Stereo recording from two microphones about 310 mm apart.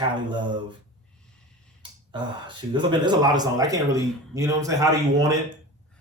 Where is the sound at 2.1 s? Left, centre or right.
Centre.